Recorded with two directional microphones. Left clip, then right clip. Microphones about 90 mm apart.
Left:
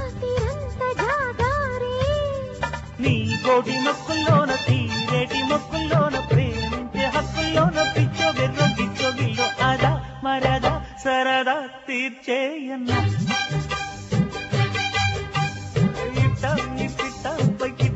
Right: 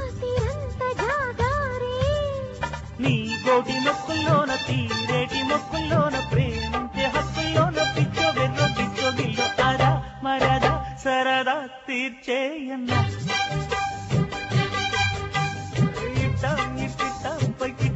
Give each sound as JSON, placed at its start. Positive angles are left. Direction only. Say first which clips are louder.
{"t": 0.3, "sound": "music", "louder": "left 2 dB", "side_deg": 35}
{"t": 11.1, "sound": "mantra", "louder": "left 2 dB", "side_deg": 30}
{"t": 16.4, "sound": "music", "louder": "right 1 dB", "side_deg": 30}